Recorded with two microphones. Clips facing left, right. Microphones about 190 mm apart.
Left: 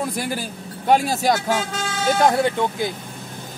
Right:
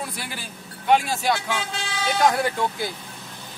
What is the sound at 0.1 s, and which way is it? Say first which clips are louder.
Speech: left 9 dB; 45° left (ahead or behind).